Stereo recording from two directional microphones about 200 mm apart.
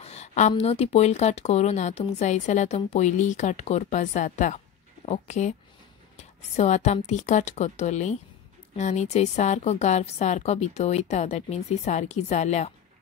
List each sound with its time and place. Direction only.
0.0 s speech: 30° left (ahead or behind)